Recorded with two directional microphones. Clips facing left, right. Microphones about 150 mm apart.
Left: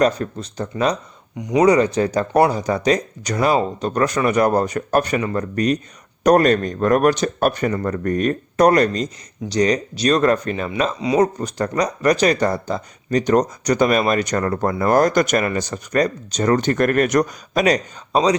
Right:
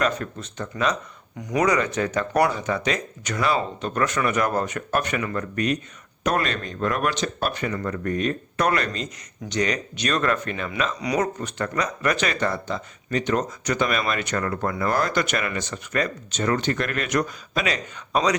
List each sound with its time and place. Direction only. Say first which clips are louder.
0.0 s speech: left 7 dB; 35° left (ahead or behind)
1.4 s speech: left 6 dB; 20° left (ahead or behind)
1.6 s speech: left 8 dB; 30° left (ahead or behind)